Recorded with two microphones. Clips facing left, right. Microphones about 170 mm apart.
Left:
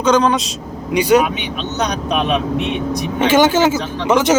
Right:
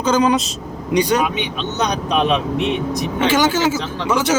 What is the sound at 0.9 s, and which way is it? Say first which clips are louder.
Speech: left 4 dB; 10° left (ahead or behind).